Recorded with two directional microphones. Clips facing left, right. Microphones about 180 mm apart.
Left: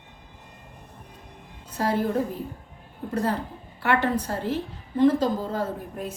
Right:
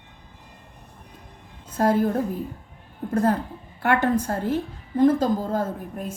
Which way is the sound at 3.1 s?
50° right (ahead or behind).